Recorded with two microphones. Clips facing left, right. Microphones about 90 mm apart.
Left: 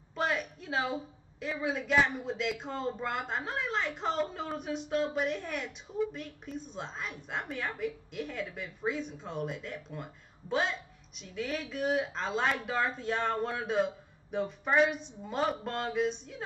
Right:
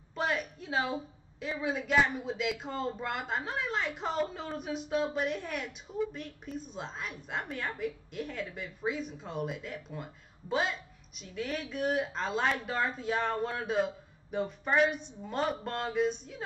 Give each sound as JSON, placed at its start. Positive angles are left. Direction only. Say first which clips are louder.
{"t": 0.1, "sound": "a woman's voice", "louder": "even", "side_deg": 0}